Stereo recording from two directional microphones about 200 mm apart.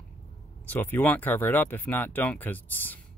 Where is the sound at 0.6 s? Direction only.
10° left (ahead or behind).